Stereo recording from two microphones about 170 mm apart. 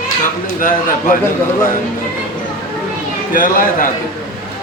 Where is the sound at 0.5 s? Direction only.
55° left (ahead or behind).